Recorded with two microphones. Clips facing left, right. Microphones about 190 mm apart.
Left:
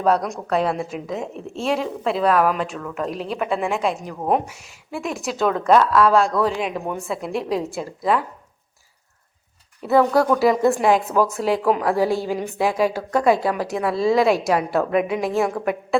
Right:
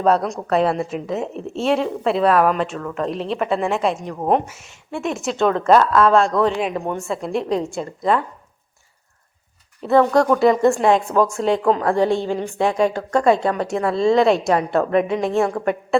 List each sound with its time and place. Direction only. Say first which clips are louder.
0.0 s a woman's voice: right 2 dB; centre (ahead or behind)
9.8 s a woman's voice: right 2 dB; 5° left (ahead or behind)